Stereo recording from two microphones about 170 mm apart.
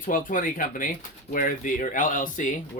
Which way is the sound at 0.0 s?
55° left (ahead or behind).